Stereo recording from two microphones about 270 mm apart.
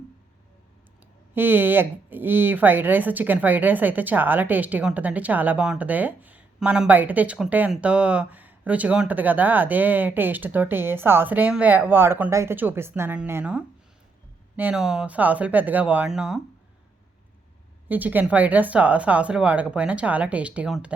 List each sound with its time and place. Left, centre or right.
1.3 s speech: centre
17.8 s speech: centre